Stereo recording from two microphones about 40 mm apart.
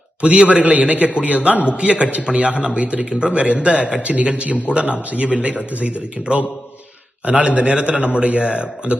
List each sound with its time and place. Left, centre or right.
0.2 s a man's voice: right
3.1 s a man's voice: right
3.3 s a man's voice: right